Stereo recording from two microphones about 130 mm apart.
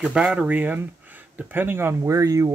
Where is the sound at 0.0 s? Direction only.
5° right (ahead or behind).